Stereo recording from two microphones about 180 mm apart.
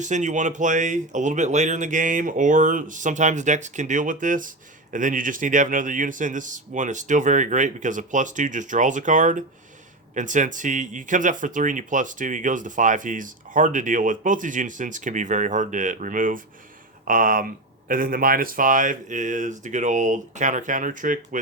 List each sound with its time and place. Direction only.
0.0 s speech: 40° right (ahead or behind)